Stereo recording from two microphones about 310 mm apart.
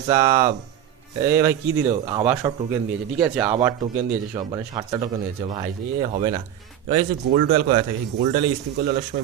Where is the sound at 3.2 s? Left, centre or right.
Centre; by 7.8 s right.